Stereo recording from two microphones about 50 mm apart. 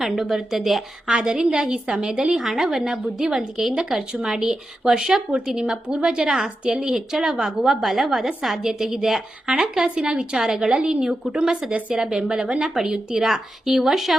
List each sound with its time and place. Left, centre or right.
0.0 s a woman's voice: centre
11.7 s a woman's voice: right
12.0 s a woman's voice: centre